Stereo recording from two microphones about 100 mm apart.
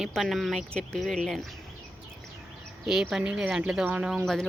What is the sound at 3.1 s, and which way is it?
Speech, 10° right (ahead or behind).